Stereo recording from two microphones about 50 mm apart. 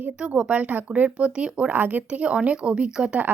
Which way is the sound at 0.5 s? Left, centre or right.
Right.